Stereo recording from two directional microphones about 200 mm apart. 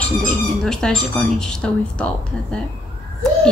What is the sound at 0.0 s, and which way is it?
Speech, 5° left (ahead or behind).